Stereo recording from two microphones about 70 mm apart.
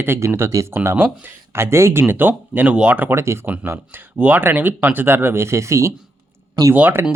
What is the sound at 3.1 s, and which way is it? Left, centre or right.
Speech, right.